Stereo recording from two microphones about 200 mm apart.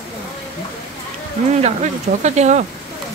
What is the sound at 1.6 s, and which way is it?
Speech, 35° right (ahead or behind).